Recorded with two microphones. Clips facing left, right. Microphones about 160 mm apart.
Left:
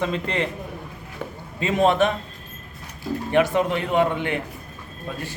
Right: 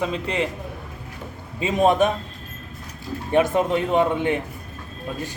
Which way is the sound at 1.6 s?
15° right (ahead or behind).